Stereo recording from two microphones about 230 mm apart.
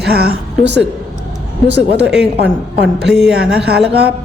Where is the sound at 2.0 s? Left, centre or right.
Centre.